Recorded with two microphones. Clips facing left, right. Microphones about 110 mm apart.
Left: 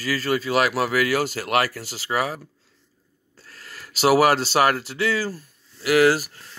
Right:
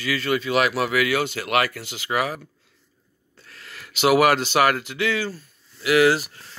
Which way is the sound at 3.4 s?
35° left (ahead or behind).